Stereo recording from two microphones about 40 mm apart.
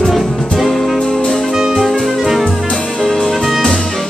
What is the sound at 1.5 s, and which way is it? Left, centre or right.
Music, centre.